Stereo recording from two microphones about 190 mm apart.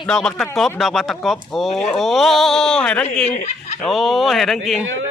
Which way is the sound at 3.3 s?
35° left (ahead or behind).